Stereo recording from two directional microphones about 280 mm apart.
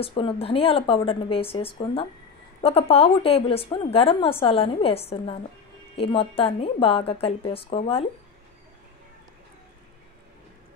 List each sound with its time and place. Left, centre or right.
0.0 s a woman's voice: centre